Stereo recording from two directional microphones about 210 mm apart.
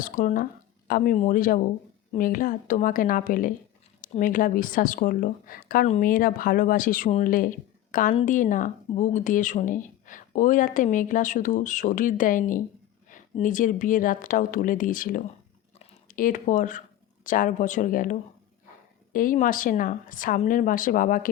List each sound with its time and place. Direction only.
0.0 s speech: 40° left (ahead or behind)